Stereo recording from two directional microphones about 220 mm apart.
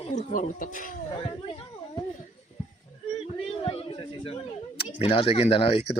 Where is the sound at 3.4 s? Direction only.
25° left (ahead or behind).